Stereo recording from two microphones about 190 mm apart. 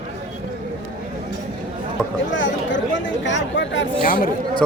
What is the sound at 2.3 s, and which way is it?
Speech, 75° left (ahead or behind).